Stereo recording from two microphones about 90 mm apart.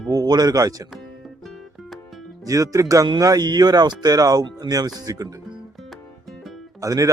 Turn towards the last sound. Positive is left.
turn(degrees=-40)  # may be behind; listen again after turning